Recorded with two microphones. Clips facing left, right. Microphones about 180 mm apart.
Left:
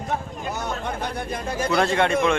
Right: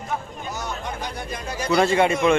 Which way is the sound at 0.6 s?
55° left (ahead or behind).